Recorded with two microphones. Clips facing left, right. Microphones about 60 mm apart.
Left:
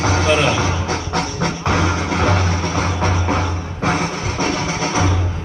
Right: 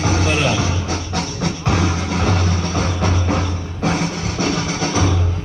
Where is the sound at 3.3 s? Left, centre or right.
Left.